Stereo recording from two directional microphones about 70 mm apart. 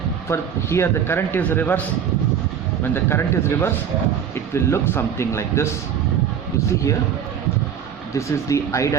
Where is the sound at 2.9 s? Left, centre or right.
Left.